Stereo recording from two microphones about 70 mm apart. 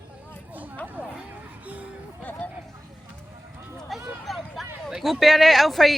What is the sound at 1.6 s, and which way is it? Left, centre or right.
Music, right.